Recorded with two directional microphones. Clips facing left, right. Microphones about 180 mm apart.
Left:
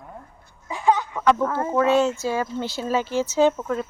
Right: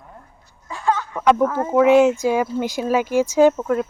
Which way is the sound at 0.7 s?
15° left (ahead or behind).